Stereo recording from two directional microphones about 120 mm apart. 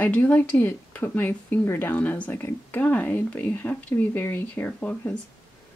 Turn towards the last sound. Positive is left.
turn(degrees=10)  # may be behind; listen again after turning